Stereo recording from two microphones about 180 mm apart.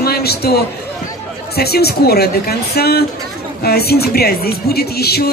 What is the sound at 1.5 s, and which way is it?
Speech, 60° left (ahead or behind).